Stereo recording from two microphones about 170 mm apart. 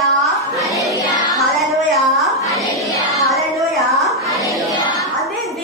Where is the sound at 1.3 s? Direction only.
Centre (ahead or behind).